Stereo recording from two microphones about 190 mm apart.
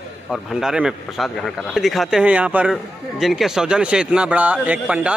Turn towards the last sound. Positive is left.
turn(degrees=-5)  # may be behind; listen again after turning